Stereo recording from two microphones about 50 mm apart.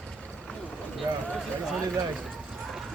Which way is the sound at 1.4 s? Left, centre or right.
Centre.